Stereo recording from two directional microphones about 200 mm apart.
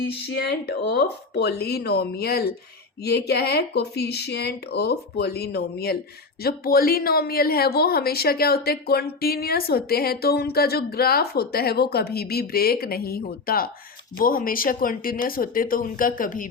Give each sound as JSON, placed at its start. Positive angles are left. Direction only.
{"t": 0.3, "sound": "a woman's voice", "side_deg": 55}